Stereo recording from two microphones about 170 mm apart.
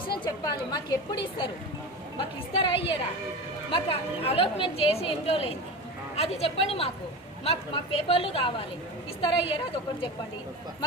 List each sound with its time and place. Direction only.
0.3 s a woman's voice: 25° left (ahead or behind)